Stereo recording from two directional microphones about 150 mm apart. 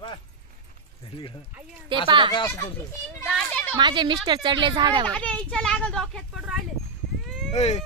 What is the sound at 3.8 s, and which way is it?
Speech, 30° right (ahead or behind).